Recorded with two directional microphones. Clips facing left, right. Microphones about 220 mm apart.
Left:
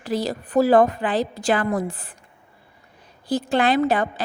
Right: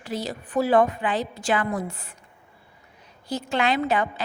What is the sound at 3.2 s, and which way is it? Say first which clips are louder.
Speech: left 4 dB; 35° left (ahead or behind).